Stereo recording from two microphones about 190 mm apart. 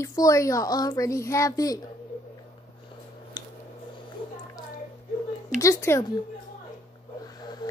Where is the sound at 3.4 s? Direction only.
25° left (ahead or behind).